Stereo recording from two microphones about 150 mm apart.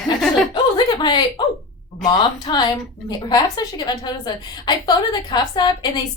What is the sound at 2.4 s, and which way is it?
A woman's voice, 30° left (ahead or behind).